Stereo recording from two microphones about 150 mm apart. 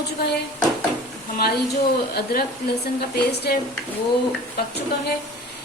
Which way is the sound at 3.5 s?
90° left.